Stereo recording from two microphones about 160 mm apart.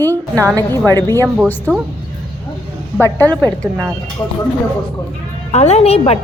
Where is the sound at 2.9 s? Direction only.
10° left (ahead or behind).